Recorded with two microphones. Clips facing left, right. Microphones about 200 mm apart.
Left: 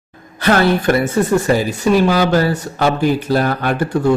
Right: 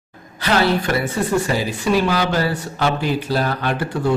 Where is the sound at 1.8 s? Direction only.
45° left (ahead or behind).